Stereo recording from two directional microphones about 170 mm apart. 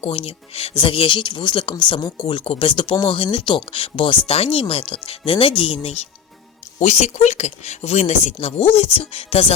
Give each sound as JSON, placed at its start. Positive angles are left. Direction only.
{"t": 0.0, "sound": "speech", "side_deg": 35}